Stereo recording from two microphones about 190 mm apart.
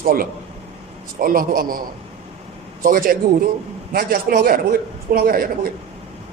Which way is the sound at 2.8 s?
50° right (ahead or behind).